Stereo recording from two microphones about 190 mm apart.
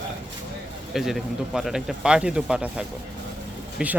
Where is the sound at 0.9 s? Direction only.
Centre (ahead or behind).